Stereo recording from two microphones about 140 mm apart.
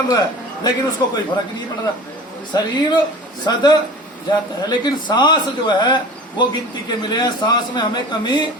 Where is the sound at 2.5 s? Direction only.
30° left (ahead or behind).